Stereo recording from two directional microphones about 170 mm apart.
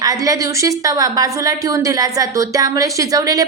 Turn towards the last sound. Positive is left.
turn(degrees=-20)  # may be behind; listen again after turning